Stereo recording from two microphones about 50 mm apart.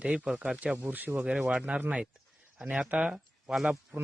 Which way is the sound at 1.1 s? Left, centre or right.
Right.